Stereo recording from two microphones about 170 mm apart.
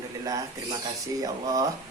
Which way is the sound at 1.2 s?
20° right (ahead or behind).